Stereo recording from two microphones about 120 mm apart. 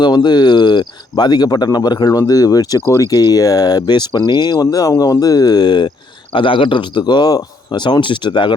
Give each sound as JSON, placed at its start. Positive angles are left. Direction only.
{"t": 0.0, "sound": "speech", "side_deg": 35}